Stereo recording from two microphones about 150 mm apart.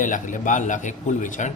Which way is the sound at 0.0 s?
60° left (ahead or behind).